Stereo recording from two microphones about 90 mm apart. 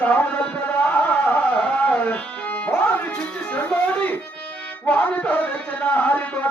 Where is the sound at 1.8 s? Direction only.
15° left (ahead or behind).